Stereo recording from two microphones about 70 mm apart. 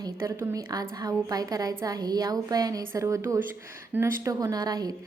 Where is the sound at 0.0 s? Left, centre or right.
Right.